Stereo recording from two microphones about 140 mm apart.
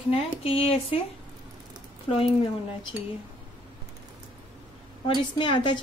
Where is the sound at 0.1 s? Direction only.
40° left (ahead or behind).